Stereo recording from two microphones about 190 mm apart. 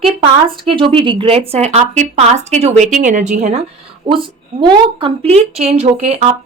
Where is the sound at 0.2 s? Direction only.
30° right (ahead or behind).